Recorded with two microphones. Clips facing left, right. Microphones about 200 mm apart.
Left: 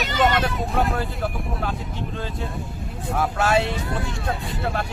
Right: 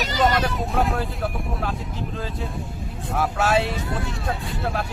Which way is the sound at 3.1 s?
Centre (ahead or behind).